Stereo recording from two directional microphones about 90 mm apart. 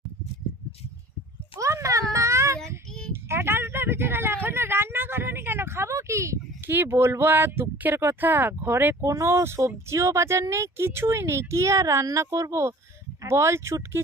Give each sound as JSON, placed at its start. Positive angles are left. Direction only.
{"t": 1.6, "sound": "a child's voice", "side_deg": -35}
{"t": 2.1, "sound": "child singing", "side_deg": -35}
{"t": 3.1, "sound": "speech", "side_deg": -25}